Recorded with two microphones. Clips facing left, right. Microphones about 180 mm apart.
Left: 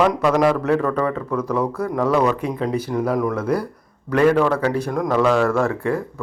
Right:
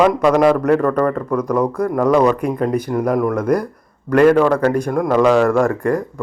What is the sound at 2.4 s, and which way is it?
Speech, 50° right (ahead or behind).